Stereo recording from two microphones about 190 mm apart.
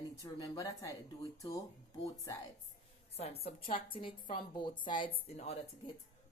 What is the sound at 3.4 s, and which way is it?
A woman's voice, 30° left (ahead or behind).